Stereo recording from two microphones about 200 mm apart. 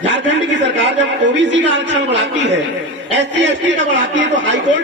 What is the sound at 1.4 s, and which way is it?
A man's voice, 65° right (ahead or behind).